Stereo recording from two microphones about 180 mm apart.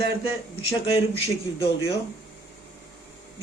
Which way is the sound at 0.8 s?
35° left (ahead or behind).